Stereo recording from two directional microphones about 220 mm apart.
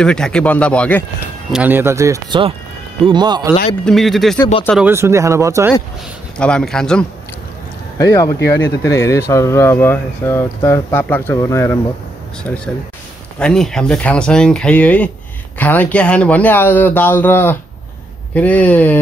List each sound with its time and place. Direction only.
0.0 s speech: 5° left (ahead or behind)
1.5 s speech: 10° right (ahead or behind)
3.8 s speech: centre (ahead or behind)
6.3 s speech: 5° left (ahead or behind)